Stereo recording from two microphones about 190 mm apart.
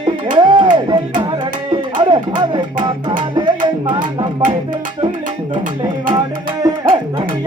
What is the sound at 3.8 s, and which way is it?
Music, 25° right (ahead or behind).